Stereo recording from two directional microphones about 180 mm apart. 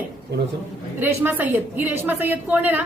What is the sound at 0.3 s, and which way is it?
Speech, 65° right (ahead or behind).